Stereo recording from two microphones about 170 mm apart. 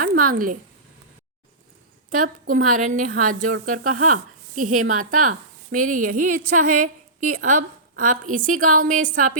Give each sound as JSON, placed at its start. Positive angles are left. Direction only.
{"t": 0.2, "sound": "a woman's voice", "side_deg": -55}
{"t": 2.0, "sound": "a woman's voice", "side_deg": -50}